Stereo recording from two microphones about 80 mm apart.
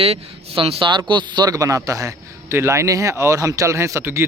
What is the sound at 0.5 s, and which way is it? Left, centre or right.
Speech, right.